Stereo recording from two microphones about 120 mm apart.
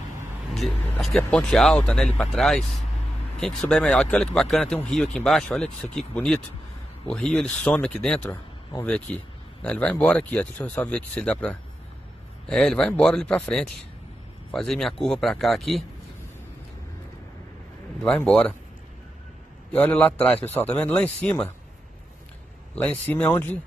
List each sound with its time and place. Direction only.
0.6 s speech: centre (ahead or behind)
18.0 s speech: 5° left (ahead or behind)
19.7 s speech: 15° left (ahead or behind)
20.2 s a man's voice: 55° left (ahead or behind)
20.5 s speech: 10° left (ahead or behind)
22.8 s speech: 15° left (ahead or behind)